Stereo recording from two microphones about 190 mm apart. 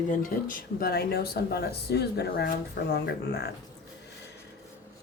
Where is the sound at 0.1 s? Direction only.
45° left (ahead or behind).